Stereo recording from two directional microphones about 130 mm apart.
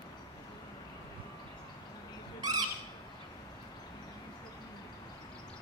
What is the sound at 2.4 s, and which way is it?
Squawk, 30° right (ahead or behind).